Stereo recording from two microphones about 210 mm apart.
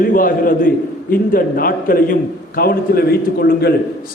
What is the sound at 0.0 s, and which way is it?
A man's voice, 40° left (ahead or behind).